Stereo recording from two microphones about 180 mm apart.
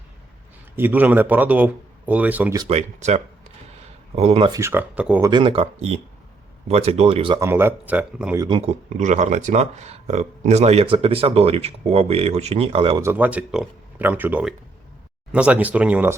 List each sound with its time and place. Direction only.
0.8 s speech: 10° right (ahead or behind)
2.6 s speech: 35° right (ahead or behind)
4.5 s speech: 15° right (ahead or behind)
5.3 s speech: 30° right (ahead or behind)
7.3 s speech: 15° right (ahead or behind)
8.4 s speech: 35° right (ahead or behind)
13.0 s speech: 10° right (ahead or behind)